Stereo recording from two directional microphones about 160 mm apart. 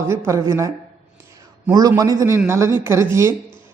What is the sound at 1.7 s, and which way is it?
A woman's voice, 25° right (ahead or behind).